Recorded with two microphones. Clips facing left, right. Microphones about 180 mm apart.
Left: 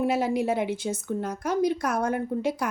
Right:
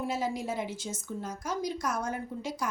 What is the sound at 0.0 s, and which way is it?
A woman's voice, 65° left (ahead or behind).